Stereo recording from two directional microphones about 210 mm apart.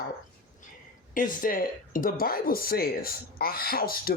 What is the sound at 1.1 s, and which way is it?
Speech, 40° left (ahead or behind).